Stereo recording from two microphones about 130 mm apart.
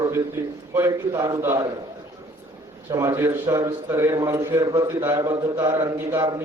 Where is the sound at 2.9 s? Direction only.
25° right (ahead or behind).